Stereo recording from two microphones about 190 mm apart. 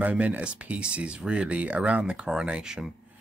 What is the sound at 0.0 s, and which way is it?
Speech, 10° right (ahead or behind).